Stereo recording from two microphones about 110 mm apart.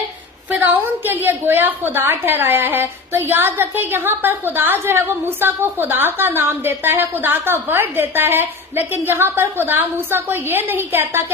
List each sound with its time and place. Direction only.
0.5 s a woman's voice: 15° right (ahead or behind)